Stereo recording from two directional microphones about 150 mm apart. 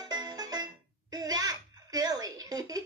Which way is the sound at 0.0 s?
25° right (ahead or behind).